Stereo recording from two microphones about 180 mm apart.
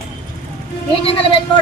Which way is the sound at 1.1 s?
30° left (ahead or behind).